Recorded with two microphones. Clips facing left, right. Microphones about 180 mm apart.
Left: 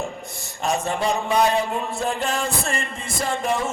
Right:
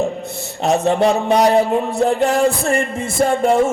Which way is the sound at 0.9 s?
60° right (ahead or behind).